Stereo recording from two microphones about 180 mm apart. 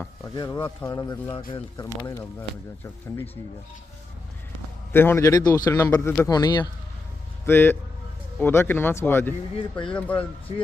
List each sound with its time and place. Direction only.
0.3 s speech: 20° left (ahead or behind)
4.9 s speech: 10° left (ahead or behind)
7.4 s speech: 10° left (ahead or behind)
9.6 s speech: 30° left (ahead or behind)
9.9 s speech: 10° left (ahead or behind)